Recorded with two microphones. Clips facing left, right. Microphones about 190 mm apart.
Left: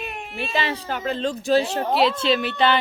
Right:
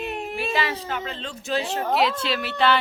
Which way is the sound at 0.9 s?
40° left (ahead or behind).